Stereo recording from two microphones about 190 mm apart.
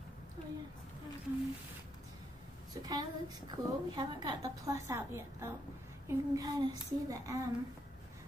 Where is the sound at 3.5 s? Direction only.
20° right (ahead or behind).